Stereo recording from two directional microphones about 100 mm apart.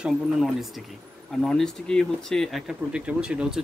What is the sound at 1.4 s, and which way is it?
Speech, 5° left (ahead or behind).